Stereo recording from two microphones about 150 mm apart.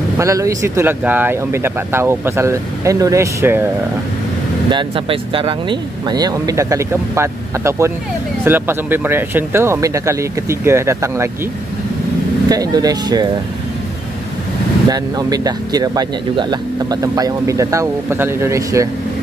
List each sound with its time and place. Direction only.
0.2 s speech: 20° right (ahead or behind)
4.6 s speech: 35° right (ahead or behind); by 11.2 s 20° right (ahead or behind)
12.4 s speech: 25° right (ahead or behind)
14.9 s speech: 25° right (ahead or behind)